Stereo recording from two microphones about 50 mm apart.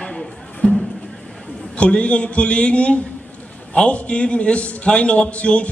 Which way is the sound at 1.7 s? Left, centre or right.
Left.